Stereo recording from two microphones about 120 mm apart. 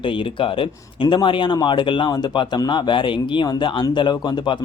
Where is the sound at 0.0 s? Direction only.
45° left (ahead or behind).